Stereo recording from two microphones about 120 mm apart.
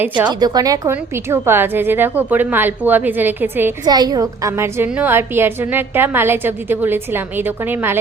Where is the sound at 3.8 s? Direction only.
35° right (ahead or behind).